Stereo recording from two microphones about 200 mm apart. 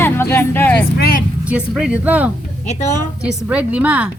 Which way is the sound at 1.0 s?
45° left (ahead or behind).